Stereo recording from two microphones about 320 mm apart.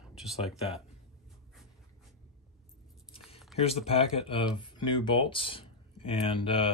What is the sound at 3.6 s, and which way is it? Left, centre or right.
Speech, centre.